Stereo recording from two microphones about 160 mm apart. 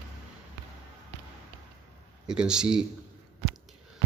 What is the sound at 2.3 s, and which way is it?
Speech, 5° right (ahead or behind).